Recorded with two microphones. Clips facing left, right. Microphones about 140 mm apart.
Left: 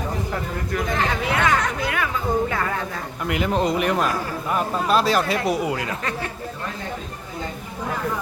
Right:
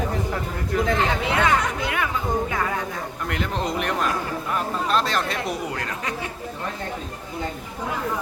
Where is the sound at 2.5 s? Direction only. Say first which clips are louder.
Left 1 dB; 10° right (ahead or behind).